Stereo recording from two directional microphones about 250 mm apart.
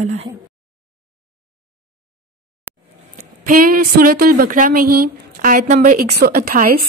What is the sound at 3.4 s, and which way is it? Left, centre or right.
A woman's voice, right.